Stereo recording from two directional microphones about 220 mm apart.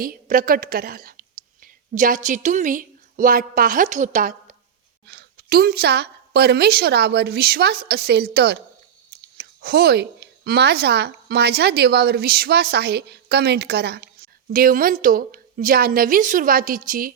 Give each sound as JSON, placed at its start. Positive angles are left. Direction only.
{"t": 0.0, "sound": "a woman's voice", "side_deg": -40}